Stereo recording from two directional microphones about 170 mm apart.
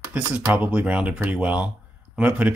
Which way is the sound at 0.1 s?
10° right (ahead or behind).